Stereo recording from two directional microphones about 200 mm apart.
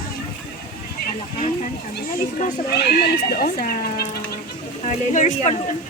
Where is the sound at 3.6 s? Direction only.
45° left (ahead or behind).